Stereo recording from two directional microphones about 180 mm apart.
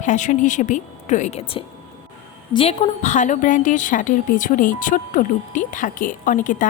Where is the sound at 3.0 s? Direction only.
40° left (ahead or behind).